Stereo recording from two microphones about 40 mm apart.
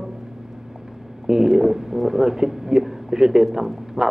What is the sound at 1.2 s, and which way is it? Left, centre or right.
Speech, centre.